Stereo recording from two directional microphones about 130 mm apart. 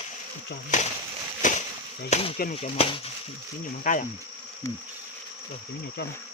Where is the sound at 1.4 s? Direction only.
75° left (ahead or behind).